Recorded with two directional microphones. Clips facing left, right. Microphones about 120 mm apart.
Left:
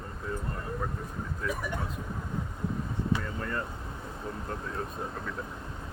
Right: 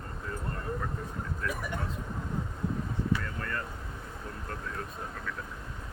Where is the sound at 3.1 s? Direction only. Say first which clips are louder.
Left 2 dB; 20° left (ahead or behind).